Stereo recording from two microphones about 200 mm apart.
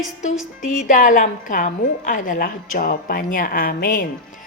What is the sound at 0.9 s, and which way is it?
A woman's voice, 40° left (ahead or behind).